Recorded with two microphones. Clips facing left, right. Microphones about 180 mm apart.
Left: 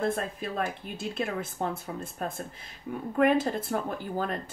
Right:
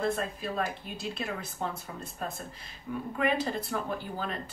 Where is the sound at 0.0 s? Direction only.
50° left (ahead or behind).